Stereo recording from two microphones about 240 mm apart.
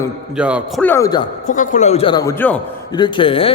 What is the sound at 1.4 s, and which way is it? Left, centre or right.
A man's voice, left.